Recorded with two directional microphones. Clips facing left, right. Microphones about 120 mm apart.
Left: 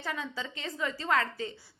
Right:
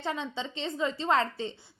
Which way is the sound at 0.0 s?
25° right (ahead or behind).